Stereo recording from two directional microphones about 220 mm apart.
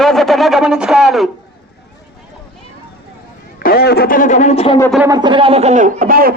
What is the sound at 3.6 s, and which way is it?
Speech, 45° left (ahead or behind).